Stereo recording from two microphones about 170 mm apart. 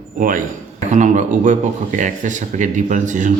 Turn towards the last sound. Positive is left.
turn(degrees=-45)  # may be behind; listen again after turning